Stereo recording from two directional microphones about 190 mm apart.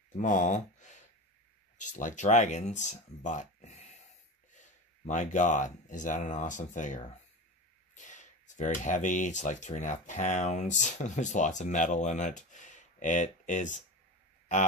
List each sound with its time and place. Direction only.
0.1 s a man's voice: 40° left (ahead or behind)